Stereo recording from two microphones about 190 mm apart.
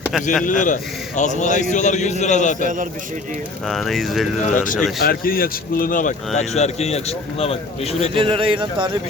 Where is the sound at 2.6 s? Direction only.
45° right (ahead or behind).